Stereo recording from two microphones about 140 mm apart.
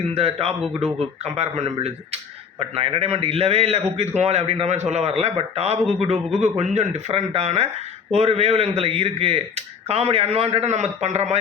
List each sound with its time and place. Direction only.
0.1 s a man's voice: 45° right (ahead or behind)